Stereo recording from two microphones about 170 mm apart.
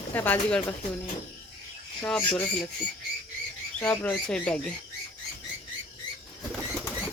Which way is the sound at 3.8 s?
5° left (ahead or behind).